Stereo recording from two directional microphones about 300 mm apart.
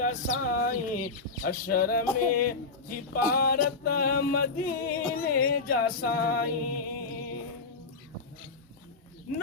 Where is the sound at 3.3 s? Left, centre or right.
Left.